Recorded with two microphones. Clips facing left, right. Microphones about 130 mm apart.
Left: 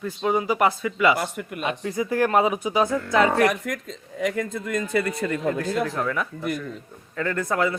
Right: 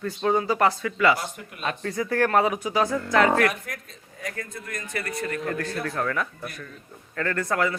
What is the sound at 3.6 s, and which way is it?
Speech, 90° left.